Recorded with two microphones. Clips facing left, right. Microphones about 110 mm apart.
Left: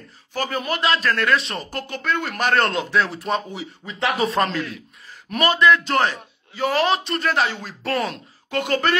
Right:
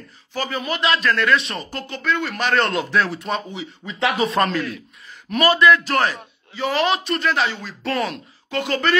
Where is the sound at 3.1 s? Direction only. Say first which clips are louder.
Left 1 dB; 30° left (ahead or behind).